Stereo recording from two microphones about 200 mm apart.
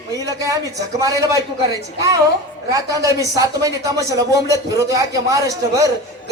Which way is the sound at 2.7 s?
15° right (ahead or behind).